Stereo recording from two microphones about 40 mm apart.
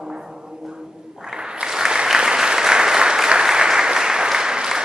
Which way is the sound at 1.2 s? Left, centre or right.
Centre.